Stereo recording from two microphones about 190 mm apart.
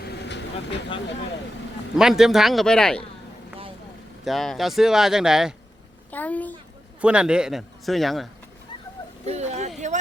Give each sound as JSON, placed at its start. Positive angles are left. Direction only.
{"t": 0.0, "sound": "vehicle", "side_deg": 60}
{"t": 2.0, "sound": "speech", "side_deg": 0}
{"t": 4.3, "sound": "speech", "side_deg": 0}
{"t": 6.1, "sound": "a child's voice", "side_deg": 10}
{"t": 7.0, "sound": "speech", "side_deg": -5}
{"t": 9.2, "sound": "speech", "side_deg": -35}